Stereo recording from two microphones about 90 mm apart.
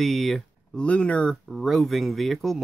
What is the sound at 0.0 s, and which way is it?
Speech, centre (ahead or behind).